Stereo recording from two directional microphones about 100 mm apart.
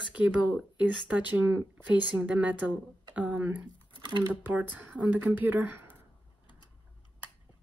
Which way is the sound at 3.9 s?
55° right (ahead or behind).